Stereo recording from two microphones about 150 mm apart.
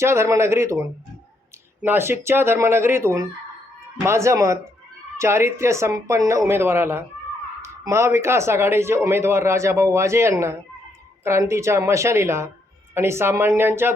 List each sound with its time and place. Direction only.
0.0 s a woman's voice: 20° right (ahead or behind)